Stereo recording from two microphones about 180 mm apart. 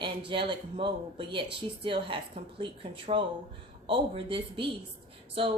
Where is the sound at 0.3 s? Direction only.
30° right (ahead or behind).